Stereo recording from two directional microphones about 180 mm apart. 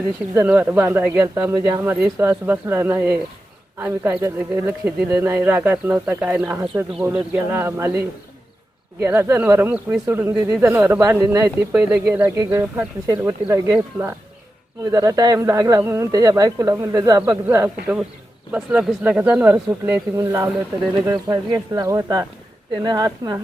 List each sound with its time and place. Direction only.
0.3 s speech: 10° right (ahead or behind)
9.0 s speech: 10° right (ahead or behind)